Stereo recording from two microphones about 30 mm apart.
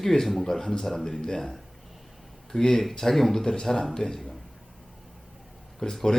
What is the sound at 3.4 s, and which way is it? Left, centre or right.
Speech, left.